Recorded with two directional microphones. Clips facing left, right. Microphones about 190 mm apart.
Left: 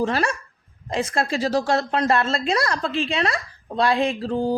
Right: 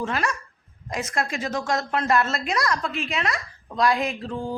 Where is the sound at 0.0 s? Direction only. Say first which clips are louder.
Left 4 dB; 30° left (ahead or behind).